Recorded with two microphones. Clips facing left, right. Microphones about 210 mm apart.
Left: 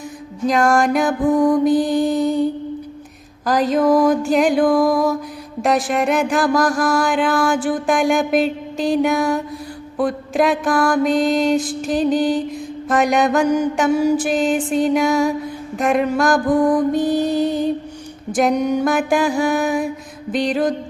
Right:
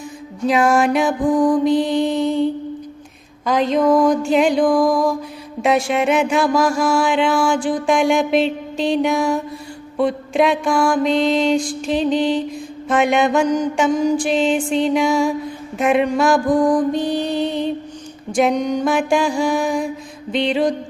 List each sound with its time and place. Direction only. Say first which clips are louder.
0.4 s mantra: even; 5° right (ahead or behind)
1.3 s mantra: left 1 dB; 25° left (ahead or behind)
1.6 s mantra: left 1 dB; centre (ahead or behind)
16.5 s mantra: left 2 dB; 20° left (ahead or behind)
17.1 s mantra: left 3 dB; centre (ahead or behind)